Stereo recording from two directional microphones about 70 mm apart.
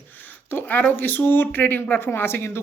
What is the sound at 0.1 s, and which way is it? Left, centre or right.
Speech, left.